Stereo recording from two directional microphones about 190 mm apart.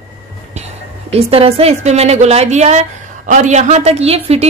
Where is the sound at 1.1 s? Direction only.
30° right (ahead or behind).